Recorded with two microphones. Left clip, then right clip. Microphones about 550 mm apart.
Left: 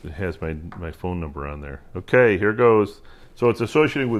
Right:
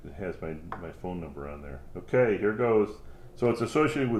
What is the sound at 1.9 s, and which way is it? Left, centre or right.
Speech, left.